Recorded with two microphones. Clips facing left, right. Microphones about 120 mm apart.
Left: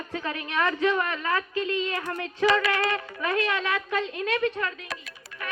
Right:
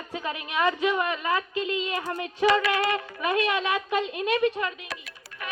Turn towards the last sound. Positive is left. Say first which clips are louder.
# right 2 dB
turn(degrees=-15)  # may be behind; listen again after turning